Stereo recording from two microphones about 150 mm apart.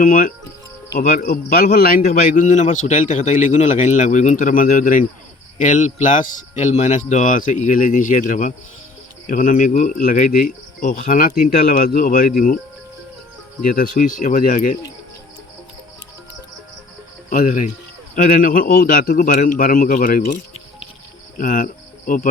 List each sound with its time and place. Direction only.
0.0 s a man's voice: 70° left (ahead or behind)
13.6 s speech: 70° left (ahead or behind)
17.2 s speech: 60° left (ahead or behind)